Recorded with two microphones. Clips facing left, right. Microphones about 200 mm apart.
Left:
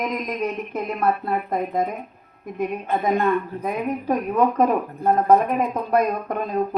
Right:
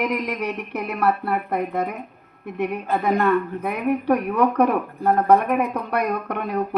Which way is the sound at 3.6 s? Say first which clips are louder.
Right 2 dB; 70° right (ahead or behind).